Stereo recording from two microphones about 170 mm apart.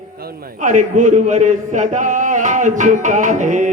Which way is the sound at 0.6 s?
50° right (ahead or behind).